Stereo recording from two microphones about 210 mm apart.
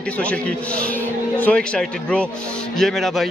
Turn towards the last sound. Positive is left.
turn(degrees=0)  # may be behind; listen again after turning